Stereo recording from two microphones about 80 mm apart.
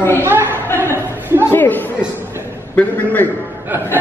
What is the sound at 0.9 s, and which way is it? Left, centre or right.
Chatter, right.